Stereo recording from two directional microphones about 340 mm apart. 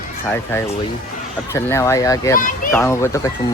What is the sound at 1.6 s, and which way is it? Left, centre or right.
Speech, centre.